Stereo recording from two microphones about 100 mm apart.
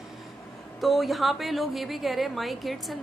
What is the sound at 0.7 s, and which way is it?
A woman's voice, centre (ahead or behind).